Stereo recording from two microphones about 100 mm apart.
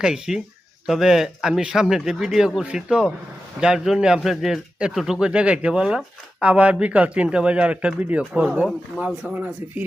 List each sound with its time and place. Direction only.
0.0 s a man's voice: 5° right (ahead or behind)